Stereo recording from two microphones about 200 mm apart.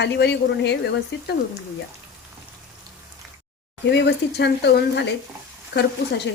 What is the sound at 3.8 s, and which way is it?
Speech, 60° left (ahead or behind).